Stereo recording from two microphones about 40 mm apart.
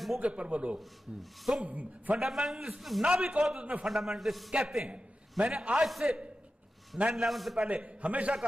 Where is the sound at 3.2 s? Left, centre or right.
Right.